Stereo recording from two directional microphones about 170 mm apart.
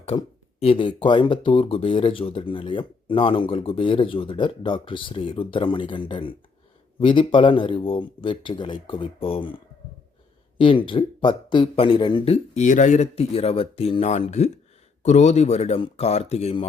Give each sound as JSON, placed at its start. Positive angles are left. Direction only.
{"t": 0.1, "sound": "speech", "side_deg": 30}
{"t": 10.6, "sound": "speech", "side_deg": 30}